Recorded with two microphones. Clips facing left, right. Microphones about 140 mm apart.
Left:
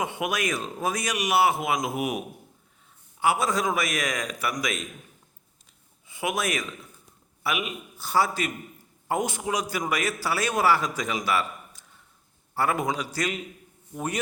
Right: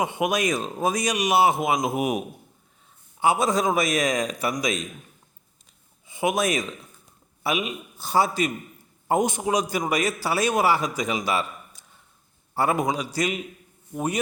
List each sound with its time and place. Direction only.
0.0 s a man's voice: 20° right (ahead or behind)
6.1 s a man's voice: 20° right (ahead or behind)